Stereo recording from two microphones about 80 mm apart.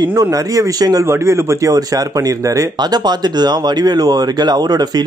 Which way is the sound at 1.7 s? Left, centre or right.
Right.